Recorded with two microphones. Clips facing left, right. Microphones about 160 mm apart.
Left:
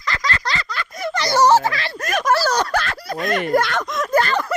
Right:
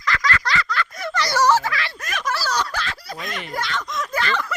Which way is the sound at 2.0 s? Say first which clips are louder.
Left 8 dB; 45° left (ahead or behind).